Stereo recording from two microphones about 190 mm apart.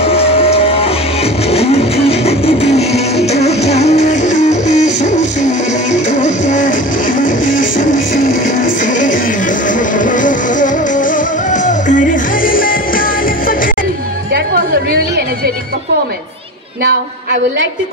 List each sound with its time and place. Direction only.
0.0 s music: 30° left (ahead or behind); by 13.7 s 45° left (ahead or behind)
14.3 s music: 50° right (ahead or behind)